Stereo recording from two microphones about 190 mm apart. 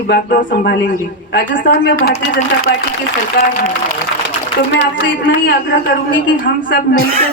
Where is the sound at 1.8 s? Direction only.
50° left (ahead or behind).